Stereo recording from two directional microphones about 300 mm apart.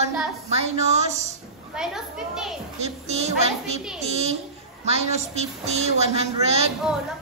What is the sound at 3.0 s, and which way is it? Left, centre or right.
A woman's voice, right.